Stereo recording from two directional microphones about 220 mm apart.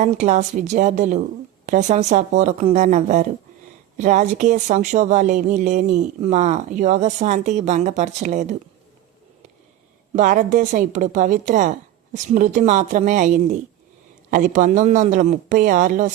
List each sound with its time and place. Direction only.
0.0 s speech: 30° right (ahead or behind)
10.2 s speech: 35° right (ahead or behind)